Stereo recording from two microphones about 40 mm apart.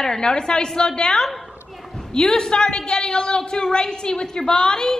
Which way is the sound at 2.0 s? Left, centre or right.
Centre.